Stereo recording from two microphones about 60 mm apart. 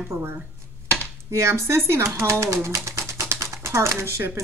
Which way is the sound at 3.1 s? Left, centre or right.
Right.